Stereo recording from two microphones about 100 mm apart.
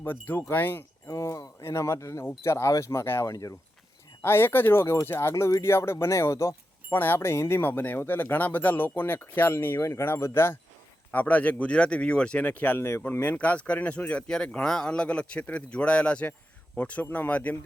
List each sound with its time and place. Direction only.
0.0 s speech: 20° left (ahead or behind)
1.0 s speech: 35° left (ahead or behind)
4.2 s speech: 25° left (ahead or behind)
5.3 s speech: 35° left (ahead or behind); by 17.6 s 15° left (ahead or behind)